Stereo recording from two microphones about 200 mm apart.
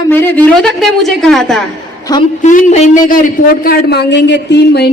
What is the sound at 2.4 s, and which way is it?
Speech, 40° left (ahead or behind).